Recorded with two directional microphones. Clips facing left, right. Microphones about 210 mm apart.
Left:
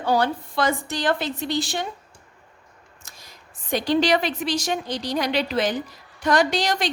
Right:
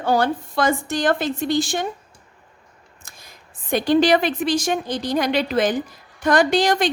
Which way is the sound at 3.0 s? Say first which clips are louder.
Right 2 dB; 55° right (ahead or behind).